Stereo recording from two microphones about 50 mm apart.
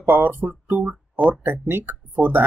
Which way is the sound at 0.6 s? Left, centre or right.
Right.